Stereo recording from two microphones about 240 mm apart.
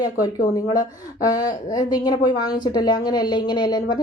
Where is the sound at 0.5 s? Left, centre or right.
Centre.